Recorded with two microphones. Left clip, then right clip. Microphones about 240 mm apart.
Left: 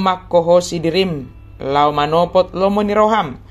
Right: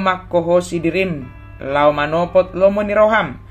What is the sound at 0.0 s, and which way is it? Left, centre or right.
Speech, left.